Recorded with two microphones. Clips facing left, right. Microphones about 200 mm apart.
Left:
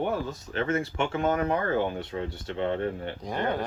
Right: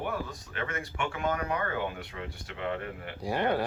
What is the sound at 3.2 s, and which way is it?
Speech, 10° right (ahead or behind).